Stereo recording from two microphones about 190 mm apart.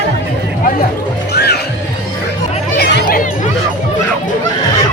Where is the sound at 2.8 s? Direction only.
60° left (ahead or behind).